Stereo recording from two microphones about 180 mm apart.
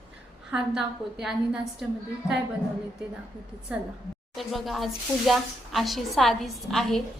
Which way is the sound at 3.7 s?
5° right (ahead or behind).